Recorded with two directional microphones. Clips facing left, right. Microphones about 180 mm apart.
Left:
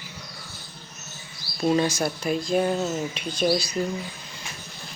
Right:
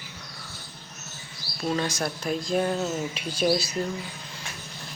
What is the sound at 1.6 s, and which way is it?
Speech, 15° left (ahead or behind).